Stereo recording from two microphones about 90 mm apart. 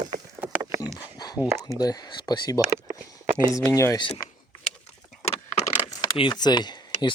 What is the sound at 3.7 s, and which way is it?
Speech, 35° left (ahead or behind).